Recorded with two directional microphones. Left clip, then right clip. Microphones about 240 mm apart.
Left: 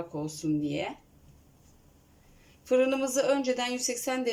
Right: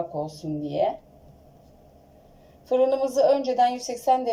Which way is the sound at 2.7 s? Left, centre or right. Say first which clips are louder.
Right 4 dB; left.